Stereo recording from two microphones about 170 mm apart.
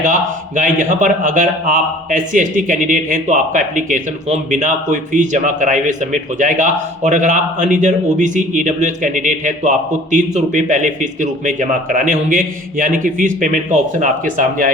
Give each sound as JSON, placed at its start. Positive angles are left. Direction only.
{"t": 0.0, "sound": "a man's voice", "side_deg": -50}